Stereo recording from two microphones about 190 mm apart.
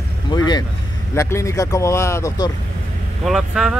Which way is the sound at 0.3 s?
20° left (ahead or behind).